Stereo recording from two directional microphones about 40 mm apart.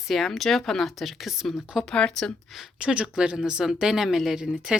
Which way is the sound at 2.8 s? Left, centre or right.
Right.